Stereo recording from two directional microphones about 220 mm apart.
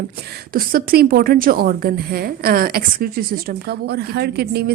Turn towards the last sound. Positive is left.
turn(degrees=-45)  # may be behind; listen again after turning